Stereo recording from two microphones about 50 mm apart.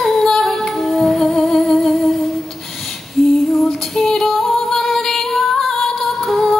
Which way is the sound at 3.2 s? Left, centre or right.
Centre.